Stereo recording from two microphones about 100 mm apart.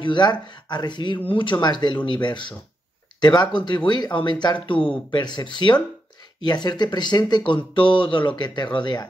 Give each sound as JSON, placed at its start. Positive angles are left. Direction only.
{"t": 0.0, "sound": "speech", "side_deg": 50}